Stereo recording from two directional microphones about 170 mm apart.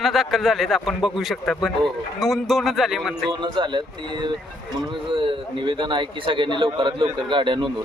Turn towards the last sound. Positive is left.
turn(degrees=-30)  # may be behind; listen again after turning